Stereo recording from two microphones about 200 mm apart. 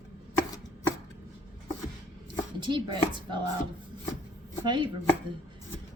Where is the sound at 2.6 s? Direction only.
25° right (ahead or behind).